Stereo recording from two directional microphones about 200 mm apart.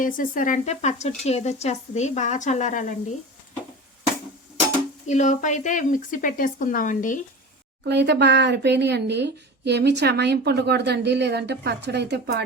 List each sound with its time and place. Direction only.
0.0 s speech: 40° left (ahead or behind)
5.0 s speech: 35° left (ahead or behind)
7.9 s speech: 60° right (ahead or behind)